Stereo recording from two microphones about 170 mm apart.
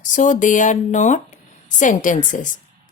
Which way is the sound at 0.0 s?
50° left (ahead or behind).